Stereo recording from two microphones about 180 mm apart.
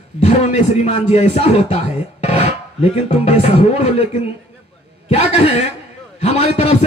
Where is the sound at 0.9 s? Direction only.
40° left (ahead or behind).